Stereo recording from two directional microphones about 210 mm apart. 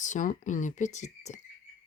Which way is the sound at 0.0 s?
35° left (ahead or behind).